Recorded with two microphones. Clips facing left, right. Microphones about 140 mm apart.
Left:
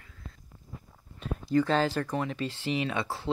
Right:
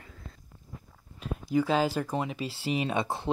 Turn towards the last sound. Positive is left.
turn(degrees=-20)  # may be behind; listen again after turning